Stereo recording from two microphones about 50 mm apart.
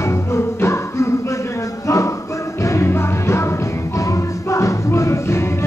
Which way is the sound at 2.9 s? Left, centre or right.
Left.